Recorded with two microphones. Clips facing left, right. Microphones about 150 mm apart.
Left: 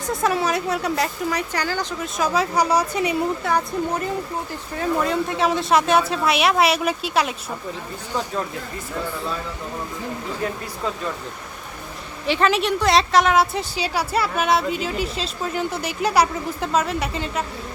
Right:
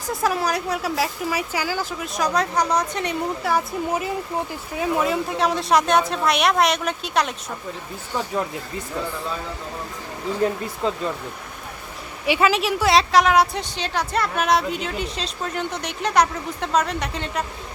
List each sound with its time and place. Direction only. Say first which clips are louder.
0.1 s a woman's voice: left 1 dB; centre (ahead or behind)
3.5 s a woman's voice: even; 5° right (ahead or behind)
10.8 s speech: right 3 dB; 25° right (ahead or behind)
12.2 s a woman's voice: even; 10° right (ahead or behind)